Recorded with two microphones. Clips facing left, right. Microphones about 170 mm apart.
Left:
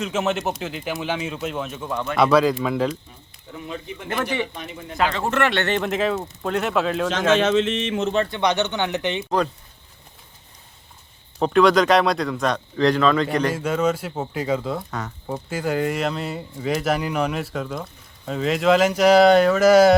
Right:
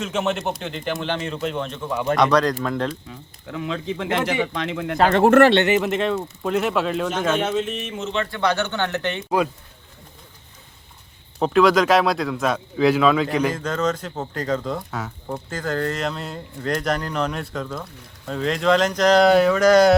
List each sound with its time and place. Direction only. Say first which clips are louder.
0.0 s a man's voice: even; centre (ahead or behind)
3.1 s speech: right 7 dB; 90° right
5.1 s speech: right 10 dB; 60° right (ahead or behind)
5.6 s a man's voice: right 2 dB; 5° right (ahead or behind)
7.1 s speech: left 3 dB; 90° left
8.3 s speech: left 1 dB; 20° left (ahead or behind)
11.3 s a man's voice: even; centre (ahead or behind)
13.5 s speech: left 2 dB; 10° left (ahead or behind)
15.4 s a man's voice: left 2 dB; 10° left (ahead or behind)